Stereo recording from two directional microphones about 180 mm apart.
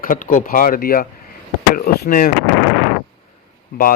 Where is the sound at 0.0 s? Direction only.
45° left (ahead or behind).